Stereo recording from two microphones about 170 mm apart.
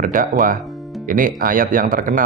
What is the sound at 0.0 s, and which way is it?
Speech, 50° right (ahead or behind).